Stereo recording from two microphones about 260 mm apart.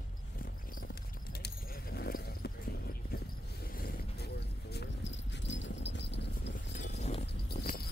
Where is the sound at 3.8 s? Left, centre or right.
Left.